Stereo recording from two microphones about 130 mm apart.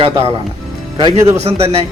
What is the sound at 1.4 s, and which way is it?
Speech, 50° right (ahead or behind).